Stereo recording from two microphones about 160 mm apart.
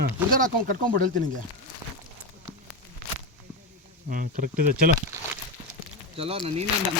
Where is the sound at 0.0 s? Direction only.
60° right (ahead or behind).